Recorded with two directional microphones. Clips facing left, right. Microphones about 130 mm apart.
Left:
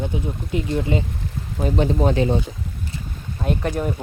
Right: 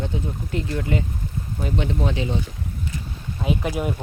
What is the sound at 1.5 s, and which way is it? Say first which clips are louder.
Speech: left 6 dB; 40° left (ahead or behind).